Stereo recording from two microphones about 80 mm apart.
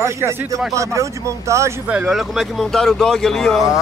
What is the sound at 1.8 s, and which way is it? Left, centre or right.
Speech, centre.